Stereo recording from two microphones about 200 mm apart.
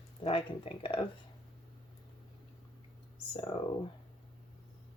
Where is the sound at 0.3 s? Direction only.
25° left (ahead or behind).